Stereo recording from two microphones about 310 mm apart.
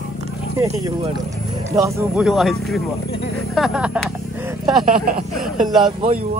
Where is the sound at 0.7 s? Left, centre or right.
Centre.